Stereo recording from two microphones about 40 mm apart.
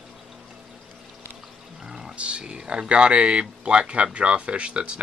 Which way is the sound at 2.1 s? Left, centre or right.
Right.